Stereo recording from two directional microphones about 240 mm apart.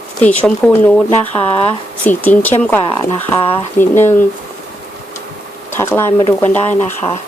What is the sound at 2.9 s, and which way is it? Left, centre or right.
Speech, centre.